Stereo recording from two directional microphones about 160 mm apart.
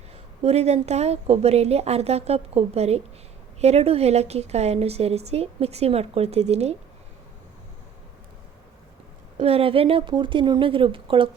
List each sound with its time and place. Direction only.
0.4 s a woman's voice: 40° right (ahead or behind)
9.4 s a woman's voice: 35° right (ahead or behind)